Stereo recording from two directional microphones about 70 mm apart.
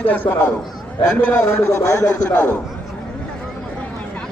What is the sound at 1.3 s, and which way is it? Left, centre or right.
Speech, left.